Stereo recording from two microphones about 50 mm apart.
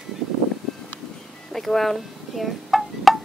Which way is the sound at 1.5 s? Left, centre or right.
Centre.